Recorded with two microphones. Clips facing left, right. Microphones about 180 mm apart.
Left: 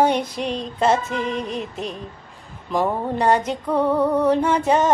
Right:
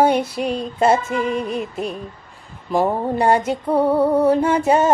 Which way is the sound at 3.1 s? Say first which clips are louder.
Right 1 dB; 10° right (ahead or behind).